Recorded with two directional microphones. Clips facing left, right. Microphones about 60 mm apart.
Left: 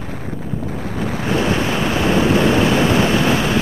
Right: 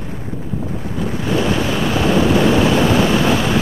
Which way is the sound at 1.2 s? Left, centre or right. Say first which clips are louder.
Even; left.